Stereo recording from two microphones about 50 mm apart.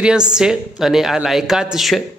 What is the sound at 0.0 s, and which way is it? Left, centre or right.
Speech, centre.